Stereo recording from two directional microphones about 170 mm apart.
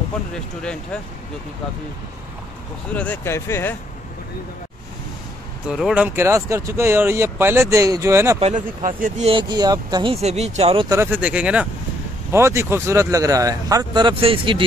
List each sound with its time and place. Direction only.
2.9 s speech: 10° left (ahead or behind)
5.7 s speech: 5° right (ahead or behind)
8.4 s speech: 45° right (ahead or behind)
9.3 s speech: 25° right (ahead or behind)
10.2 s speech: 40° right (ahead or behind)
10.9 s speech: 15° right (ahead or behind); by 14.6 s 30° right (ahead or behind)